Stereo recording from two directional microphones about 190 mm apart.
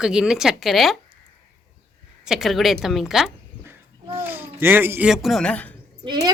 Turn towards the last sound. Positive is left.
turn(degrees=-25)  # may be behind; listen again after turning